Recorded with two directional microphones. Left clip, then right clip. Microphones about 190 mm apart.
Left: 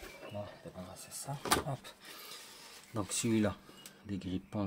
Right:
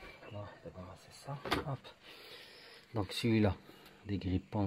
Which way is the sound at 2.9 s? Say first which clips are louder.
Even; 25° right (ahead or behind).